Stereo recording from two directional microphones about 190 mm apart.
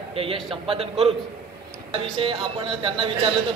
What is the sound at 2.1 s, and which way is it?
A man's voice, 30° right (ahead or behind).